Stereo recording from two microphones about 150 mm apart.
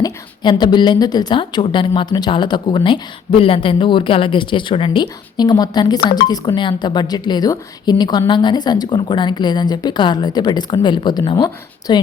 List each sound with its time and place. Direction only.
0.0 s a woman's voice: 30° left (ahead or behind)